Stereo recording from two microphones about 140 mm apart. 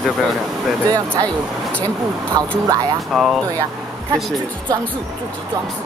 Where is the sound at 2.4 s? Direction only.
30° right (ahead or behind).